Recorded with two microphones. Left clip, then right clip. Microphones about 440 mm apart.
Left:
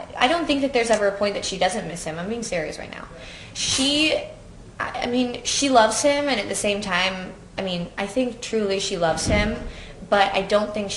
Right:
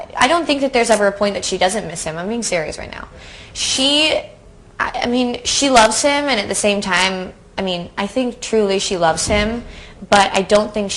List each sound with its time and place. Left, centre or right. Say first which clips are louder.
0.1 s a woman's voice: right 6 dB; right